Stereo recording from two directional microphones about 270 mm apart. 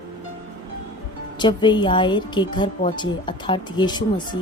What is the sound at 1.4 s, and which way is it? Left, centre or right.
A woman's voice, centre.